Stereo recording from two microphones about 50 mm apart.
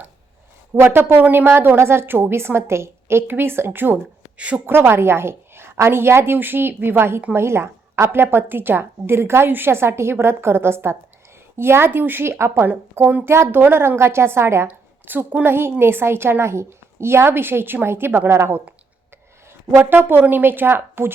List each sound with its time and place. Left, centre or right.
0.8 s a woman's voice: right
4.4 s a woman's voice: right
4.6 s a woman's voice: right
12.6 s a woman's voice: right
15.0 s a woman's voice: right
15.4 s a woman's voice: right
19.8 s a woman's voice: right